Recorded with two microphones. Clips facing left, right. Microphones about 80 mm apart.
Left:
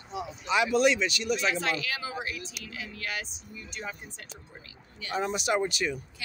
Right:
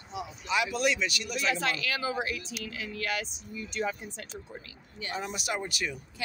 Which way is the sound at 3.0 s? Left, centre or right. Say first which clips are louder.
Right 3 dB; right.